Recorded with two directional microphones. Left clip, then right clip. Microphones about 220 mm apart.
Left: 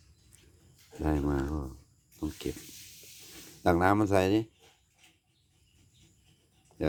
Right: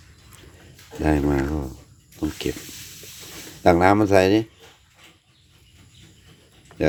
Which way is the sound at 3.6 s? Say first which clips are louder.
Right 9 dB; centre (ahead or behind).